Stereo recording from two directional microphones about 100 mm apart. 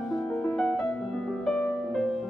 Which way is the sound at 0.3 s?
10° left (ahead or behind).